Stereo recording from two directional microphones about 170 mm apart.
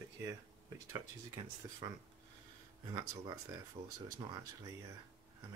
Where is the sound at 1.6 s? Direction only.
20° right (ahead or behind).